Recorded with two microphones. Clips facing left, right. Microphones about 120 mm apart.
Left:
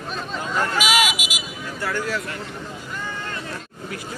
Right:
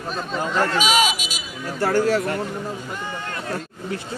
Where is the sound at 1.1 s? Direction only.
10° left (ahead or behind).